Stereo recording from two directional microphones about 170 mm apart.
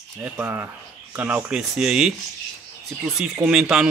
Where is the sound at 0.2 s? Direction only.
15° right (ahead or behind).